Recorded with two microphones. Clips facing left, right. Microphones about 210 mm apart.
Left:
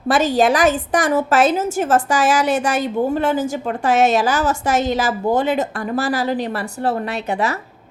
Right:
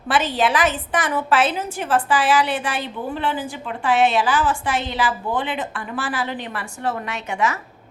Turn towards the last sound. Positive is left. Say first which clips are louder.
# left 3 dB
turn(degrees=35)  # may be behind; listen again after turning